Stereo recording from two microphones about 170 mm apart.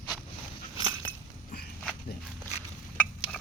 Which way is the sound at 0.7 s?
25° right (ahead or behind).